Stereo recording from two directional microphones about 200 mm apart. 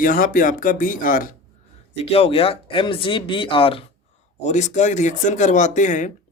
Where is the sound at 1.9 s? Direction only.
30° left (ahead or behind).